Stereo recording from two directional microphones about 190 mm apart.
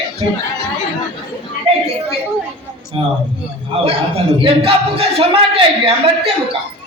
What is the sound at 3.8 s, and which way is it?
A man's voice, 30° right (ahead or behind).